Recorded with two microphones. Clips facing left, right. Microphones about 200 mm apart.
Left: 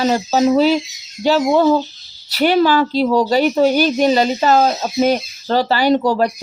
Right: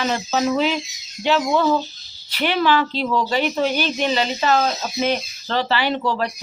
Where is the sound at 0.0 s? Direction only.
35° left (ahead or behind).